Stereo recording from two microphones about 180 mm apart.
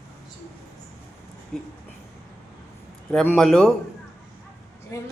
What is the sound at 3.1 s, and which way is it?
Speech, 5° left (ahead or behind).